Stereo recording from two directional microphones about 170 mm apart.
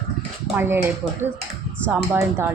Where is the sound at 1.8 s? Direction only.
15° right (ahead or behind).